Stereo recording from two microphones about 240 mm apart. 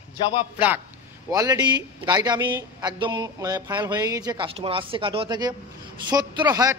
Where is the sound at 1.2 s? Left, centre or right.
Centre.